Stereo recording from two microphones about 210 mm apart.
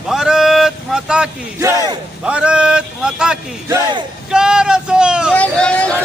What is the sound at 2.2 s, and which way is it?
Speech, 5° right (ahead or behind).